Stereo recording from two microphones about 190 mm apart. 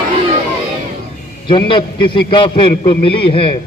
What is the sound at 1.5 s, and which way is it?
A man's voice, 25° left (ahead or behind).